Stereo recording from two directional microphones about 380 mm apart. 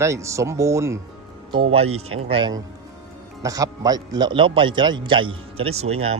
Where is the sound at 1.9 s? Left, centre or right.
Right.